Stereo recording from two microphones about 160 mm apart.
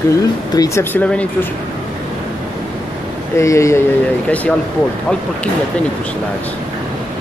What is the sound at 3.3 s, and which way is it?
Speech, 20° left (ahead or behind).